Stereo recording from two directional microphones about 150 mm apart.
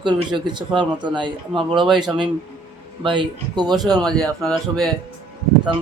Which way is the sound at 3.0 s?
30° right (ahead or behind).